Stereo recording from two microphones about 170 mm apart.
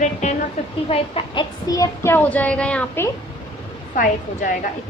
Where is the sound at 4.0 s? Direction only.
50° left (ahead or behind).